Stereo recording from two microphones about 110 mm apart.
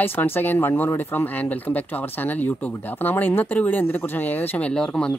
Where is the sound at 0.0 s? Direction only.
20° left (ahead or behind).